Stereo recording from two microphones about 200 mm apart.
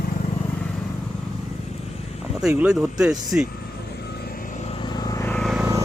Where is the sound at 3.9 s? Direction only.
50° left (ahead or behind); by 5.3 s 15° left (ahead or behind).